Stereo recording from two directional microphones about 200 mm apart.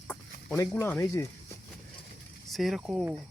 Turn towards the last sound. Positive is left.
turn(degrees=-5)  # may be behind; listen again after turning